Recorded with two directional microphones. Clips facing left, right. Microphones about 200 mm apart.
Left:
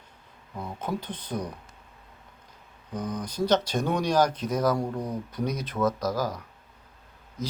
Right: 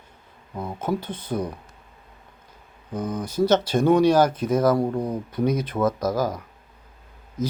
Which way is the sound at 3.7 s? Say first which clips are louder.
Right 9 dB; 55° right (ahead or behind).